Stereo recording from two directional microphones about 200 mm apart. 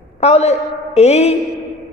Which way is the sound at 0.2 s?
30° left (ahead or behind).